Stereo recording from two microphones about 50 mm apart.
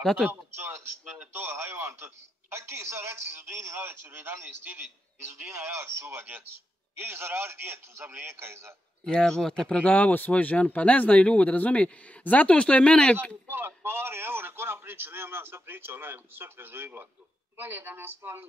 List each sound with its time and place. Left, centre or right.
0.0 s speech: centre
0.3 s a man's voice: right
6.0 s a man's voice: right
9.0 s speech: centre
9.8 s a man's voice: left
13.5 s a man's voice: right